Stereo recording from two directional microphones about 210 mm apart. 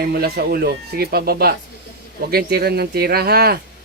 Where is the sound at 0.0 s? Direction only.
45° right (ahead or behind).